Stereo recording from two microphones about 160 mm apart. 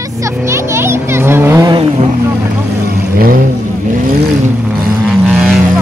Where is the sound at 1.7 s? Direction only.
35° right (ahead or behind).